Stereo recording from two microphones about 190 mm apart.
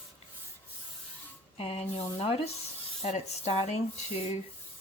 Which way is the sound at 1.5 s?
35° left (ahead or behind).